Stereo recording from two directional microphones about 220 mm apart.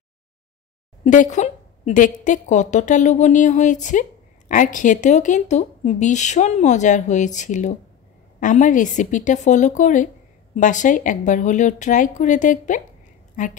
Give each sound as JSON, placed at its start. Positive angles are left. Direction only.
{"t": 1.0, "sound": "speech", "side_deg": 35}